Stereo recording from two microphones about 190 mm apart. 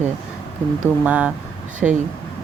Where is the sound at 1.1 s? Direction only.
5° right (ahead or behind).